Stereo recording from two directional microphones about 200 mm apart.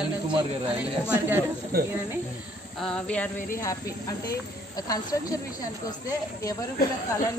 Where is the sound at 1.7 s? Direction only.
50° right (ahead or behind).